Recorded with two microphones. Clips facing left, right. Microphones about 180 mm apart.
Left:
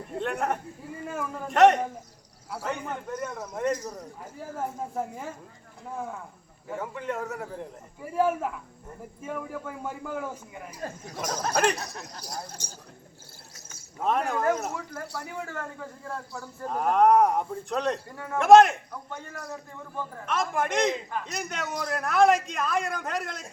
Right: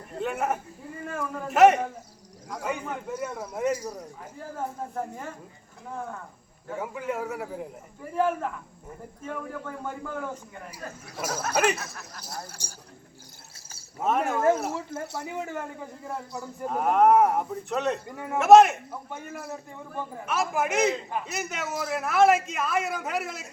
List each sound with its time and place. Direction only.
0.2 s a man's voice: 5° right (ahead or behind)
4.9 s a man's voice: 10° left (ahead or behind)
6.7 s speech: 5° right (ahead or behind)
8.1 s a man's voice: 5° left (ahead or behind)
10.8 s speech: 35° left (ahead or behind)
11.2 s a man's voice: 10° right (ahead or behind)
14.0 s a man's voice: 5° right (ahead or behind)
14.7 s a man's voice: 25° right (ahead or behind)
16.6 s a man's voice: 5° right (ahead or behind)
19.1 s a man's voice: 20° right (ahead or behind)
20.2 s a man's voice: 5° right (ahead or behind)